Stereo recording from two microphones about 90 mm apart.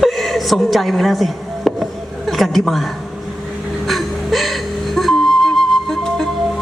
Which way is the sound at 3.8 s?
Centre (ahead or behind).